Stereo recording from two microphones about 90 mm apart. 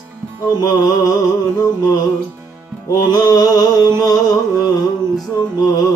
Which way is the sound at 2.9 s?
45° left (ahead or behind).